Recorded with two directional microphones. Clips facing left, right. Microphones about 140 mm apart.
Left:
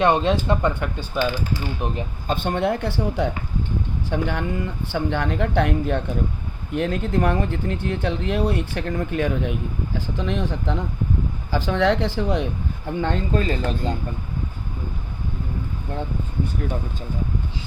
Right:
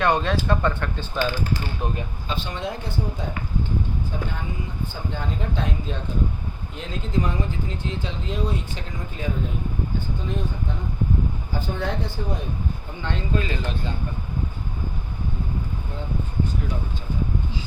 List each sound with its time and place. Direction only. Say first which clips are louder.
0.0 s speech: left 3 dB; 20° left (ahead or behind)
2.2 s speech: left 9 dB; 55° left (ahead or behind); by 12.5 s 90° left
13.0 s speech: left 4 dB; 45° left (ahead or behind)